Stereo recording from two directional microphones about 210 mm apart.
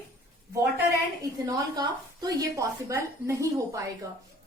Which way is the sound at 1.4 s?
15° right (ahead or behind).